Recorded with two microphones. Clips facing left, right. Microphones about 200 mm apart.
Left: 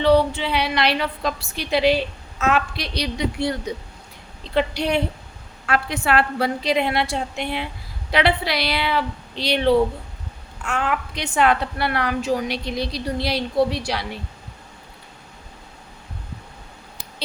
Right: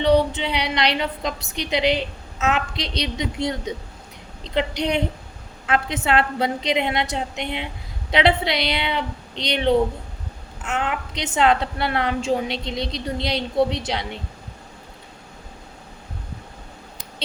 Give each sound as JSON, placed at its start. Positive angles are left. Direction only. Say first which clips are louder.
{"t": 0.0, "sound": "a woman's voice", "louder": "left 1 dB", "side_deg": -20}